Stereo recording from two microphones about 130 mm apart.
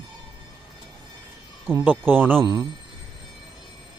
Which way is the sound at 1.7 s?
15° right (ahead or behind).